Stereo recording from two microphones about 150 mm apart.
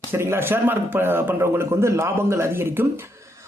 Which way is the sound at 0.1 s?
15° right (ahead or behind).